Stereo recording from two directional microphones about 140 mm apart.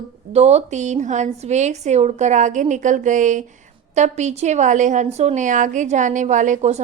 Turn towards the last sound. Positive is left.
turn(degrees=-60)  # may be behind; listen again after turning